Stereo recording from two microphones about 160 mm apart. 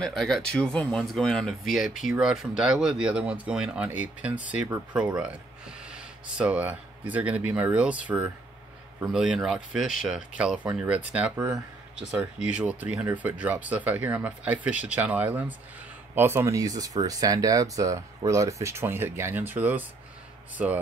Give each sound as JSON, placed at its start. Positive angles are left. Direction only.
{"t": 0.0, "sound": "speech", "side_deg": 5}